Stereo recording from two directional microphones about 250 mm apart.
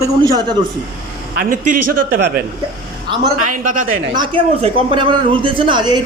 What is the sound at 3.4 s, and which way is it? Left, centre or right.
Speech, right.